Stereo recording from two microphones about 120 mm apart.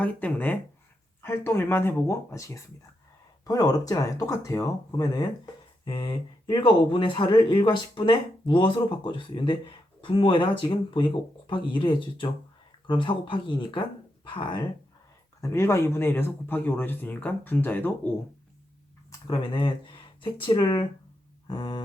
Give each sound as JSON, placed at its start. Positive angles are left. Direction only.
{"t": 0.0, "sound": "a man's voice", "side_deg": 10}
{"t": 5.8, "sound": "speech", "side_deg": 45}
{"t": 15.4, "sound": "a man's voice", "side_deg": 25}
{"t": 19.3, "sound": "speech", "side_deg": 40}
{"t": 21.4, "sound": "a sound", "side_deg": 35}